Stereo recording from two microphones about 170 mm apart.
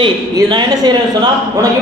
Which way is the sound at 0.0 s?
25° right (ahead or behind).